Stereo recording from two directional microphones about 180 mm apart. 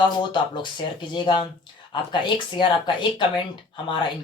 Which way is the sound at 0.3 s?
25° left (ahead or behind).